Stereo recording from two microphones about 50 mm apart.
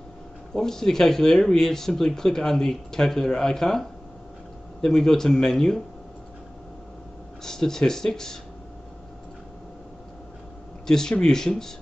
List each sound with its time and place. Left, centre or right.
0.6 s speech: centre
4.8 s speech: centre
7.4 s speech: centre
10.9 s speech: centre